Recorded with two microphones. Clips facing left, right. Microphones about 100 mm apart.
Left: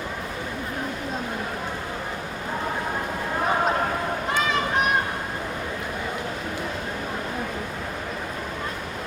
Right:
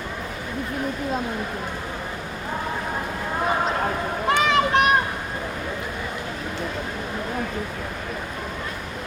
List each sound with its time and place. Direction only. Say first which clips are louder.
4.4 s children playing: right 5 dB; 70° right (ahead or behind)